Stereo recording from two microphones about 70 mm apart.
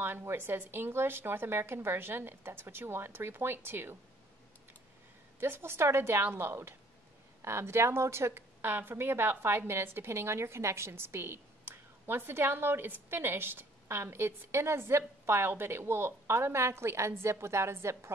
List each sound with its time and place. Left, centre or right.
0.0 s a woman's voice: right
5.4 s a woman's voice: right